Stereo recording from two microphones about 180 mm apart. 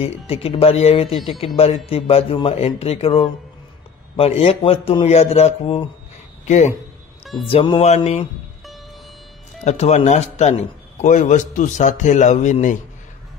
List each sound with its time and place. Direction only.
0.0 s a man's voice: 35° left (ahead or behind)
9.7 s a man's voice: 35° left (ahead or behind)